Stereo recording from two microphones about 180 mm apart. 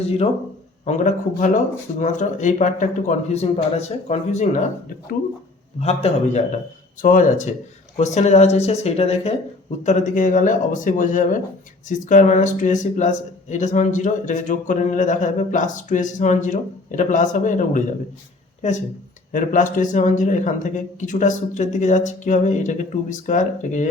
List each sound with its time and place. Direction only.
0.9 s speech: 40° left (ahead or behind)
5.8 s speech: 35° left (ahead or behind)
19.3 s speech: 45° left (ahead or behind)